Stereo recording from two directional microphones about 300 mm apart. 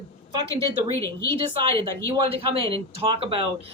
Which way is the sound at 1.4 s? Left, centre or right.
Centre.